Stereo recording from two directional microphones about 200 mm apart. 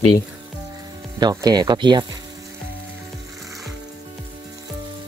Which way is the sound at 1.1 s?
20° right (ahead or behind).